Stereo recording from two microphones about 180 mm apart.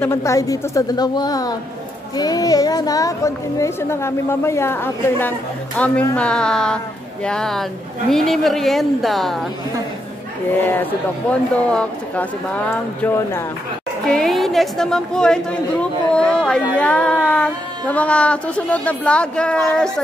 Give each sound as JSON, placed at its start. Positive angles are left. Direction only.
{"t": 0.0, "sound": "a woman's voice", "side_deg": 15}
{"t": 10.6, "sound": "a woman's voice", "side_deg": 10}